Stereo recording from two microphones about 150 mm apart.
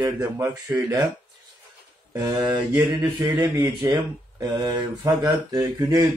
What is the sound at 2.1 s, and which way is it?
A man's voice, 20° right (ahead or behind).